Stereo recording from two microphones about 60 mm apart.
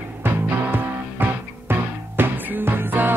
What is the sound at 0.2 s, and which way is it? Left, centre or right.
Music, right.